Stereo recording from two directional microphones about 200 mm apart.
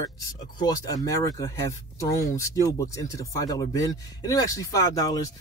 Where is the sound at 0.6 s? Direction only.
20° left (ahead or behind).